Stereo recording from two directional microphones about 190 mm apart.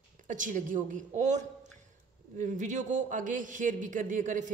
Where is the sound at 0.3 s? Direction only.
45° right (ahead or behind).